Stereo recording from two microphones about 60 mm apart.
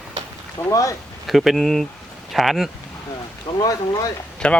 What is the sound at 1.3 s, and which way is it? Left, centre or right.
Speech, centre.